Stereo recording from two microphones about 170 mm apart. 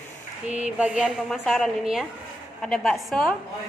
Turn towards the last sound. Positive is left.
turn(degrees=0)  # may be behind; listen again after turning